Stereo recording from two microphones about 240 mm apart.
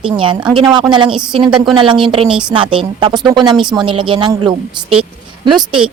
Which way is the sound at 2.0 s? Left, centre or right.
Right.